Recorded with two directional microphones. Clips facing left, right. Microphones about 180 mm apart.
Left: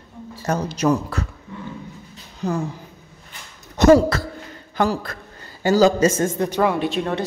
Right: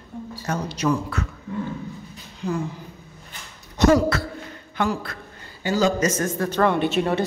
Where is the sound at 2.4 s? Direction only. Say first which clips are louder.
Left 2 dB; 40° left (ahead or behind).